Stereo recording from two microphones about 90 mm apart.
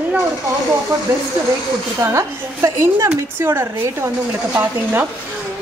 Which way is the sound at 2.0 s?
30° right (ahead or behind).